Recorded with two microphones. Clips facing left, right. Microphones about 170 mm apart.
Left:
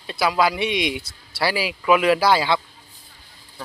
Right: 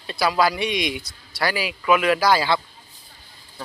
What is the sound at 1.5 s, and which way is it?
A woman's voice, 30° left (ahead or behind).